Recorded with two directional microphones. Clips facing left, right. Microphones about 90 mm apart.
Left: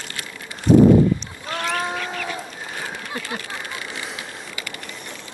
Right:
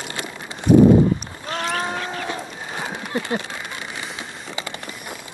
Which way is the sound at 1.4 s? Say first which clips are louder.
Right 1 dB; 35° right (ahead or behind).